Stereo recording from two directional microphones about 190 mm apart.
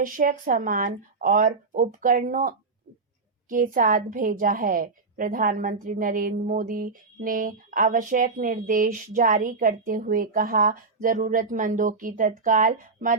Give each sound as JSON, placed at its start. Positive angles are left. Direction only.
{"t": 0.0, "sound": "a woman's voice", "side_deg": -45}